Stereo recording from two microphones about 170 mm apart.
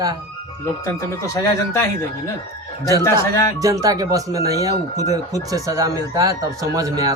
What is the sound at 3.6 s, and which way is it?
Speech, 20° right (ahead or behind).